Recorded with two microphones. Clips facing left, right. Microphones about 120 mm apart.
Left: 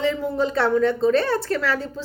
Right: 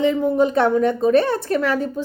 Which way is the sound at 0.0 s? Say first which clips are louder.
Right 5 dB; 20° right (ahead or behind).